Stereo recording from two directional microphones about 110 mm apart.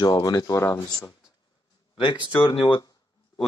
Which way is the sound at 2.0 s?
45° left (ahead or behind).